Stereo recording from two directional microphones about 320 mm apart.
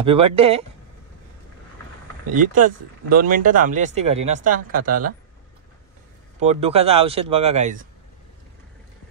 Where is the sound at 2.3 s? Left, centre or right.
Right.